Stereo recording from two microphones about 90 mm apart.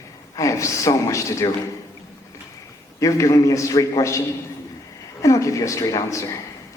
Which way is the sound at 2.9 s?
35° left (ahead or behind).